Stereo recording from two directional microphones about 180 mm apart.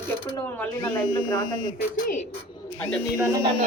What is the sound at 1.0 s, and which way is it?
Speech, 25° left (ahead or behind).